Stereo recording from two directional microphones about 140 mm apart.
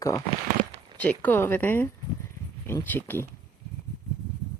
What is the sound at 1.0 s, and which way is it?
Speech, 10° left (ahead or behind).